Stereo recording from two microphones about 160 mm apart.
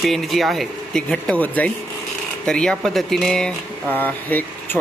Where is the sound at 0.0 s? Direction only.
Centre (ahead or behind).